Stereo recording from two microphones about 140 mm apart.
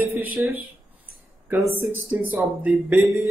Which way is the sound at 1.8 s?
15° right (ahead or behind).